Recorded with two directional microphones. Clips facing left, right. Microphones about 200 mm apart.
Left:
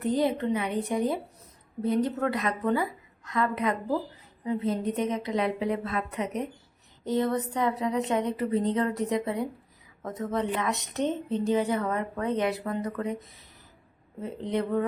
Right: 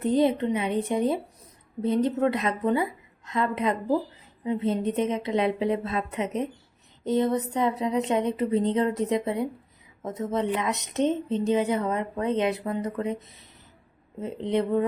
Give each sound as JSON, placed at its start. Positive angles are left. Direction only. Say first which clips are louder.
{"t": 0.0, "sound": "a woman's voice", "louder": "right 3 dB", "side_deg": -20}